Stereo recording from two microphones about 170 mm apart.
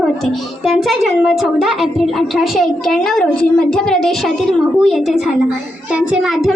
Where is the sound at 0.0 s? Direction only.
Centre (ahead or behind).